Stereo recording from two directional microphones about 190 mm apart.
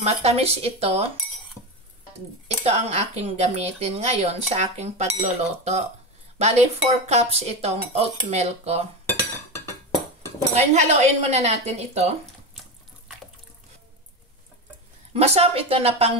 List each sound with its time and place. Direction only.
0.0 s speech: 35° right (ahead or behind)
2.4 s speech: 35° right (ahead or behind)
10.5 s speech: 35° right (ahead or behind)
15.1 s speech: 35° right (ahead or behind)